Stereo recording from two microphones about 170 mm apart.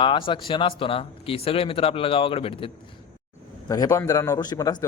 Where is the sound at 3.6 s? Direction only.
20° left (ahead or behind).